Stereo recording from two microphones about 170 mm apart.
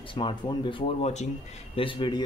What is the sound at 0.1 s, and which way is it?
Speech, 30° left (ahead or behind).